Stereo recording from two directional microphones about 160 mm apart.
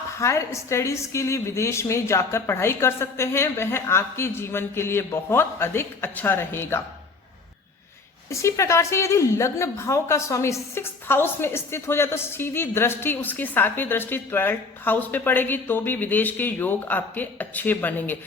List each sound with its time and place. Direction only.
0.2 s a woman's voice: 20° left (ahead or behind)
8.3 s a woman's voice: 20° left (ahead or behind)